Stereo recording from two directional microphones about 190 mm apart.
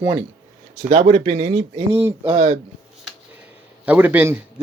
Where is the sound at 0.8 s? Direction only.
40° right (ahead or behind).